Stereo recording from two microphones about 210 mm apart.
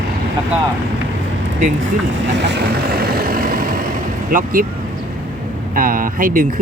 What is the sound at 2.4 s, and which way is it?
Speech, 50° right (ahead or behind).